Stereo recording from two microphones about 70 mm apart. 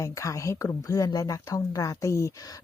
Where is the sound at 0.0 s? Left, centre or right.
Left.